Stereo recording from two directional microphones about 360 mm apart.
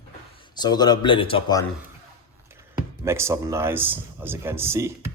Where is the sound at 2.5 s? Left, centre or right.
Centre.